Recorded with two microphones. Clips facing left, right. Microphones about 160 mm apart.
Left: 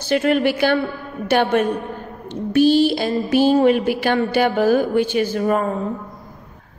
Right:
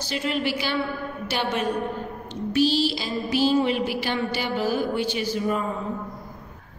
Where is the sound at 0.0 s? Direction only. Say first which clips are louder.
Left 9 dB; 55° left (ahead or behind).